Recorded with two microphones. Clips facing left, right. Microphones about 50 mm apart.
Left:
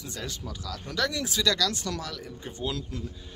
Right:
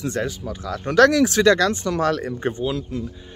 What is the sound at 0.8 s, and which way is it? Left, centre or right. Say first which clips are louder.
Speech: right 15 dB; right.